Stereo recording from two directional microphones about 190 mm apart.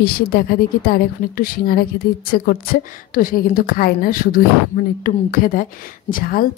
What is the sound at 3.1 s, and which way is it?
Speech, 50° left (ahead or behind).